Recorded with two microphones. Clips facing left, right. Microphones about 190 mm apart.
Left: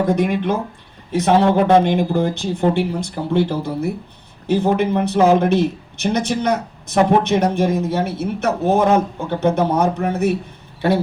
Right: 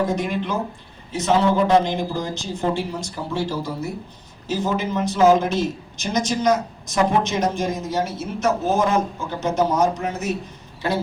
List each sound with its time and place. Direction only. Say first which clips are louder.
0.2 s a man's voice: left 5 dB; 60° left (ahead or behind)